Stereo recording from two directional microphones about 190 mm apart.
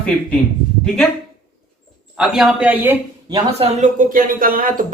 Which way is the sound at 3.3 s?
30° right (ahead or behind).